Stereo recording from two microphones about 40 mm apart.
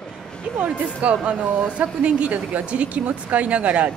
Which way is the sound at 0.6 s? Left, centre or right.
Right.